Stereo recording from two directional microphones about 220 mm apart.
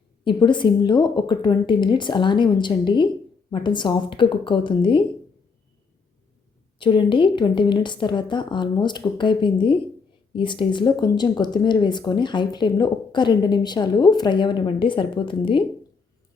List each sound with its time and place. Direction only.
0.3 s speech: 20° left (ahead or behind)
6.7 s speech: 20° left (ahead or behind)